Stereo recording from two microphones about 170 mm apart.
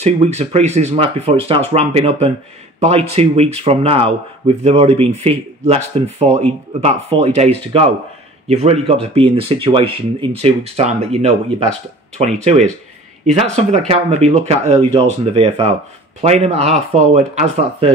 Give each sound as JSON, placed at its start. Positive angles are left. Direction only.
{"t": 0.0, "sound": "speech", "side_deg": -40}